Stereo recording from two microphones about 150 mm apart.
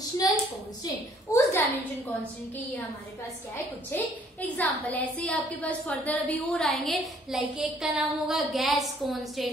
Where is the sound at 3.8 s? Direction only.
10° left (ahead or behind).